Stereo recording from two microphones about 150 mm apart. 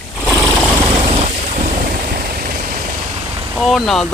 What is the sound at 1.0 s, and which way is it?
Vehicle, 40° right (ahead or behind).